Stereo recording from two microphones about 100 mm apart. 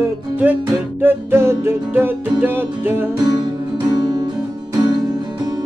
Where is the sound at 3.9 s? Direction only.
45° right (ahead or behind).